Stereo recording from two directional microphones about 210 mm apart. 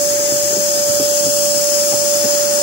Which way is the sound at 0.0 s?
45° right (ahead or behind).